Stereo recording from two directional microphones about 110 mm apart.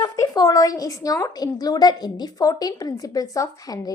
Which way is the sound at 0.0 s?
35° left (ahead or behind).